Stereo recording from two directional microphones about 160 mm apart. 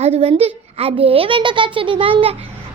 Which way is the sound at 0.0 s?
40° right (ahead or behind).